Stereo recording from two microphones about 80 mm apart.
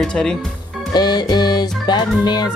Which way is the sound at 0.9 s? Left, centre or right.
Left.